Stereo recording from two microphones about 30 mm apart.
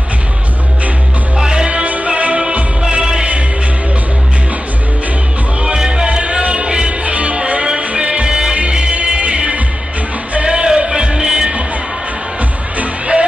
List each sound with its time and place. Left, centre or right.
1.4 s music: right
2.0 s music: right
2.9 s music: right
5.8 s music: right
6.0 s music: right
7.1 s music: right
12.7 s music: right